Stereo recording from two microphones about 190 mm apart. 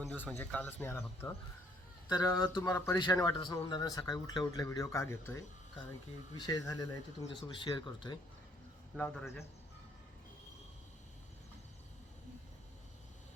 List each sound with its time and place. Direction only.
0.0 s speech: 10° left (ahead or behind)
9.0 s speech: 10° left (ahead or behind)